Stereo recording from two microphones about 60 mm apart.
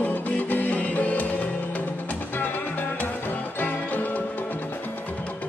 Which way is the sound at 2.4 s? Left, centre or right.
Left.